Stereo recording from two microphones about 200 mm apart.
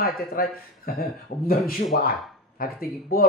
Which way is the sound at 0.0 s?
50° left (ahead or behind).